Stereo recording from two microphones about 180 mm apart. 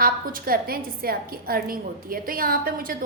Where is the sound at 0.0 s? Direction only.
55° right (ahead or behind).